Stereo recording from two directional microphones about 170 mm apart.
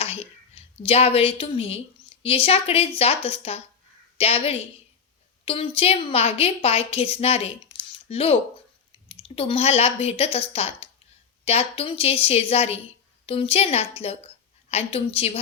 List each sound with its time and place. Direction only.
0.0 s a woman's voice: 35° left (ahead or behind)